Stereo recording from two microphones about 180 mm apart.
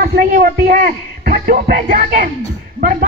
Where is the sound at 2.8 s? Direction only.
50° right (ahead or behind).